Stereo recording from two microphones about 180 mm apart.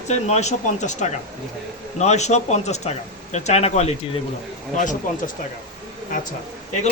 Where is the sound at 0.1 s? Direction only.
40° left (ahead or behind).